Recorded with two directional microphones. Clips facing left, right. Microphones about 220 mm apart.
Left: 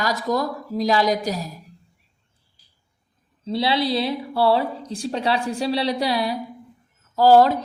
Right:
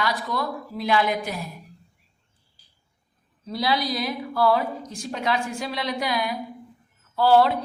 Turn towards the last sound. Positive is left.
turn(degrees=40)  # may be behind; listen again after turning